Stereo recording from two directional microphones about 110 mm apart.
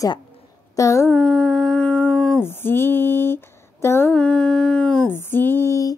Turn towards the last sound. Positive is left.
turn(degrees=25)  # may be behind; listen again after turning